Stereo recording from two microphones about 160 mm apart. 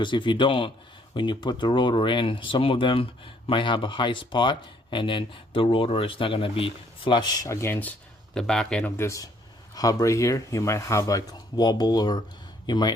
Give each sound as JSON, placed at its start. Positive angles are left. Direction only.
{"t": 0.0, "sound": "speech", "side_deg": 30}